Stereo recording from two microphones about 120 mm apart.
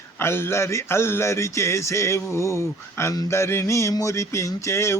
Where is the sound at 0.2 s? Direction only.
20° left (ahead or behind).